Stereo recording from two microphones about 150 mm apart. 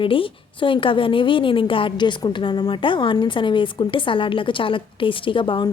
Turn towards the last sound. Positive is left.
turn(degrees=35)  # may be behind; listen again after turning